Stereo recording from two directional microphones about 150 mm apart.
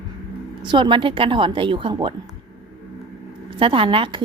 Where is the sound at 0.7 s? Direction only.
30° right (ahead or behind).